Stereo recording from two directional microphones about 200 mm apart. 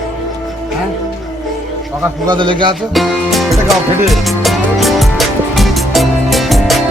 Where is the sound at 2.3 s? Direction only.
25° right (ahead or behind).